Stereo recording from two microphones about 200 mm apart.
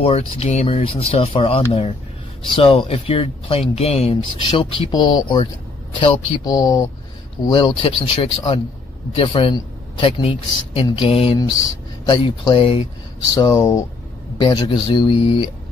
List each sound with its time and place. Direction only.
0.0 s a man's voice: 30° left (ahead or behind)